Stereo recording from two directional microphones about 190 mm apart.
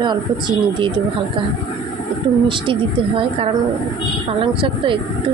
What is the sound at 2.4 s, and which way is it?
A woman's voice, 25° right (ahead or behind).